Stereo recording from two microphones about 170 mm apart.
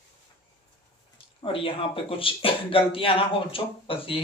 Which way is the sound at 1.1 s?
30° left (ahead or behind).